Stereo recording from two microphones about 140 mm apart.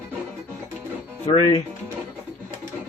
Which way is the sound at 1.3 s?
40° left (ahead or behind).